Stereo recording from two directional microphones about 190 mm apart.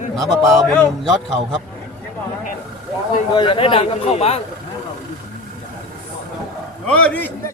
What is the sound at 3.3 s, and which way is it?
A man's voice, 25° left (ahead or behind).